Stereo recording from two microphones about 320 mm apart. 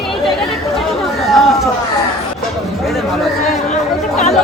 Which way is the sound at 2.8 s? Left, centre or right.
Centre.